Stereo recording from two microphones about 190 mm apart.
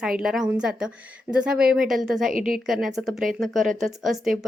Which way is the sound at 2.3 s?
45° right (ahead or behind).